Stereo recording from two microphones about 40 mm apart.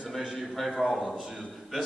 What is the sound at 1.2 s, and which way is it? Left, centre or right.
Speech, centre.